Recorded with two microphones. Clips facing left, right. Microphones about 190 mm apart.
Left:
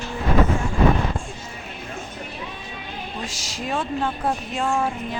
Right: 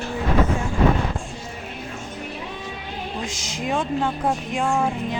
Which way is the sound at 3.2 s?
20° right (ahead or behind).